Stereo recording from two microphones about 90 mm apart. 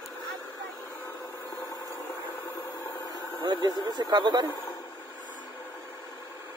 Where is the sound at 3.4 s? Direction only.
60° right (ahead or behind).